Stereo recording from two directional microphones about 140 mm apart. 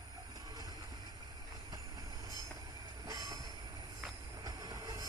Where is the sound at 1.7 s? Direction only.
25° right (ahead or behind).